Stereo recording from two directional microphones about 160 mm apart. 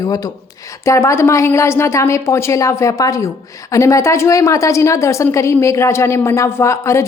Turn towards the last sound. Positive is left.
turn(degrees=20)  # may be behind; listen again after turning